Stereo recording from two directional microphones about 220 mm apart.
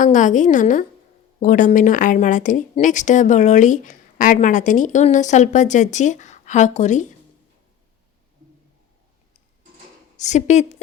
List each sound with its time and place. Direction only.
0.0 s a woman's voice: 35° left (ahead or behind)
10.2 s a woman's voice: 30° left (ahead or behind)